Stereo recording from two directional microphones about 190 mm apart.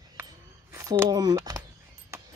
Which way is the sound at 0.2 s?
15° right (ahead or behind).